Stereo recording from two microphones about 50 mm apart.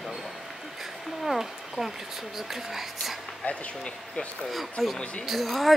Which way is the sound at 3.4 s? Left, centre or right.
Left.